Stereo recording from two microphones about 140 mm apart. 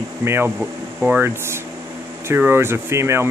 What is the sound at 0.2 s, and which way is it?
Speech, 15° right (ahead or behind).